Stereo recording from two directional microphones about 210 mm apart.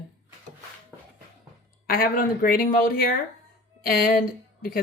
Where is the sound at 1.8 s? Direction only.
45° left (ahead or behind).